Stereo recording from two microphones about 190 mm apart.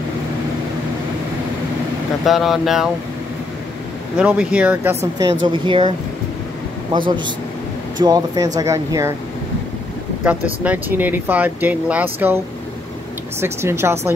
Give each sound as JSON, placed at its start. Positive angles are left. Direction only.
{"t": 2.2, "sound": "speech", "side_deg": 0}
{"t": 4.2, "sound": "speech", "side_deg": -5}
{"t": 5.2, "sound": "a woman's voice", "side_deg": -25}
{"t": 6.9, "sound": "a woman's voice", "side_deg": -25}
{"t": 10.2, "sound": "speech", "side_deg": -5}
{"t": 13.4, "sound": "speech", "side_deg": -15}